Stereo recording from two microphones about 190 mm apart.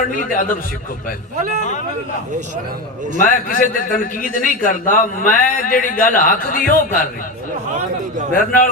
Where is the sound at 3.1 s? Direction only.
45° left (ahead or behind).